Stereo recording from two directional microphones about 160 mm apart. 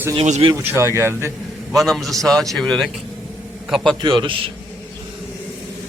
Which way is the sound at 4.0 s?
30° right (ahead or behind).